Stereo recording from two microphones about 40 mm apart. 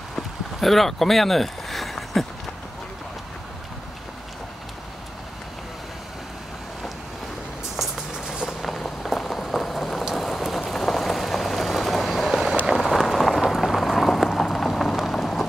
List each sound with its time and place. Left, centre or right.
0.1 s clip-clop: centre
8.1 s vehicle: centre
8.6 s rain on surface: centre
10.1 s vehicle: centre
12.7 s rain: centre
15.0 s a sound: centre